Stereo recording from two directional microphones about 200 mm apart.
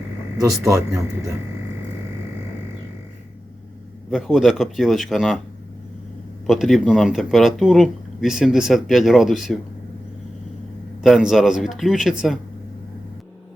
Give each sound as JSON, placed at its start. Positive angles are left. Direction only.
{"t": 0.3, "sound": "speech", "side_deg": -15}
{"t": 4.1, "sound": "speech", "side_deg": 0}
{"t": 6.5, "sound": "speech", "side_deg": 0}
{"t": 11.0, "sound": "speech", "side_deg": 0}